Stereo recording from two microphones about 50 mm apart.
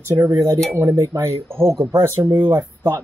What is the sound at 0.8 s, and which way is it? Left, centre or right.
Speech, right.